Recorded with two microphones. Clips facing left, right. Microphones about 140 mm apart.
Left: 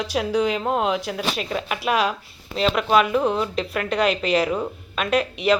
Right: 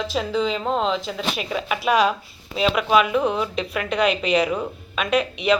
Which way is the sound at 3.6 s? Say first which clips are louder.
Even; 35° left (ahead or behind).